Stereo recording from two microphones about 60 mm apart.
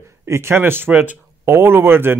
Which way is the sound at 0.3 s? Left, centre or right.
Right.